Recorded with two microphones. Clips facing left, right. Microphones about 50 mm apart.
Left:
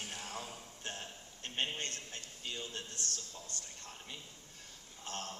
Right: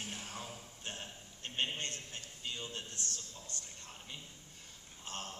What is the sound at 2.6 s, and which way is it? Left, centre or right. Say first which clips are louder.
Speech: even; right.